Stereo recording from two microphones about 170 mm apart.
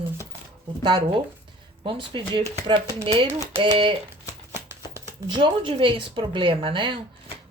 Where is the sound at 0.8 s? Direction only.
30° right (ahead or behind).